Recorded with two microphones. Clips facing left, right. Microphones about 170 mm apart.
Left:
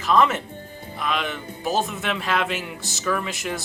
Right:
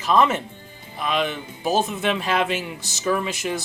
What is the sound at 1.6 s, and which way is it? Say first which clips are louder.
Speech: right 3 dB; 25° right (ahead or behind).